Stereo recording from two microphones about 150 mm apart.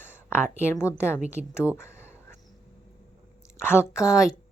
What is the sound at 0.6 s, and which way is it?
Speech, 15° left (ahead or behind).